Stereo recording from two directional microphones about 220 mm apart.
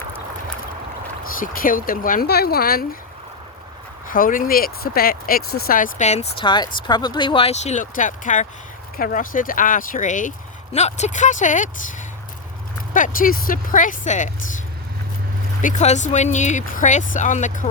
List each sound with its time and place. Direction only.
1.4 s speech: 40° left (ahead or behind)
4.1 s speech: 40° left (ahead or behind)
12.9 s speech: 40° left (ahead or behind)
15.6 s speech: 30° left (ahead or behind)